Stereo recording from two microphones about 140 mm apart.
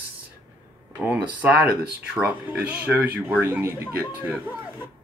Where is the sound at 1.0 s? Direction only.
10° right (ahead or behind).